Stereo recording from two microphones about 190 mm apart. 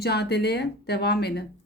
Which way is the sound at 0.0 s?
60° left (ahead or behind).